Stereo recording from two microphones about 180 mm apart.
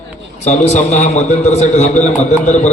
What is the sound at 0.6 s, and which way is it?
A man's voice, 40° left (ahead or behind).